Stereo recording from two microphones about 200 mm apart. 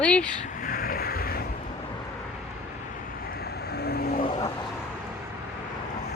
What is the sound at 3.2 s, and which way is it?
Vehicle, 50° left (ahead or behind).